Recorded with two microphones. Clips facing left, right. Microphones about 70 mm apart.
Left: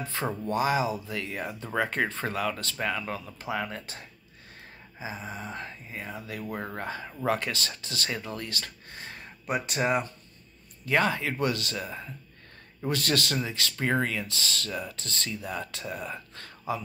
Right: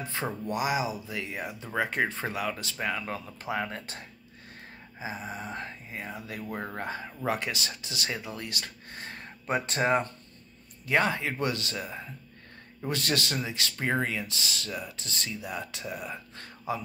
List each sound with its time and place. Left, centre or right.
0.0 s speech: right
4.9 s speech: right
6.5 s speech: centre
6.8 s speech: right